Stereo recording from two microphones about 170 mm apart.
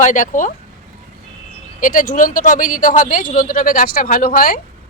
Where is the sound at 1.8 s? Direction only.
50° left (ahead or behind).